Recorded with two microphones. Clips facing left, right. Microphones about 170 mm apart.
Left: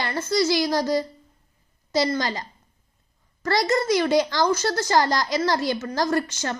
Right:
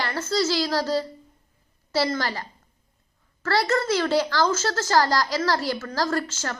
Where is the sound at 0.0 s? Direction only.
15° left (ahead or behind).